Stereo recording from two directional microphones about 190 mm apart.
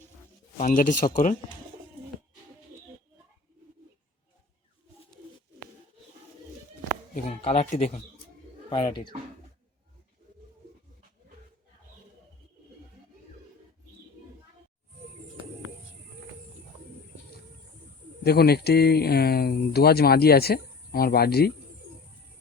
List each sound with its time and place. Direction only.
0.6 s speech: 45° left (ahead or behind)
7.1 s speech: 35° left (ahead or behind)
18.2 s speech: 55° left (ahead or behind)